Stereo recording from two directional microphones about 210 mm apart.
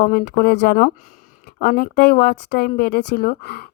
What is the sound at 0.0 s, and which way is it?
Speech, 45° left (ahead or behind).